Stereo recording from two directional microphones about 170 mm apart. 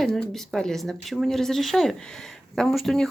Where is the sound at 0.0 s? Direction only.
Centre (ahead or behind).